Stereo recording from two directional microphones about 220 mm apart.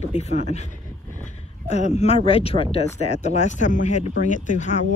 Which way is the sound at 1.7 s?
30° left (ahead or behind).